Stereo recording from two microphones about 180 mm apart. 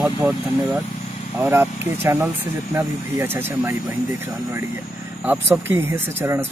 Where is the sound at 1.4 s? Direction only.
10° right (ahead or behind).